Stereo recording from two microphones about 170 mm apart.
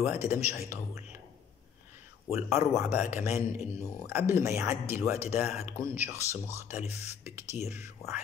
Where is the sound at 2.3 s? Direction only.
15° right (ahead or behind).